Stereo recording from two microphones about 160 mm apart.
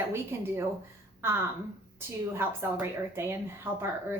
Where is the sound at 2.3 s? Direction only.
15° right (ahead or behind).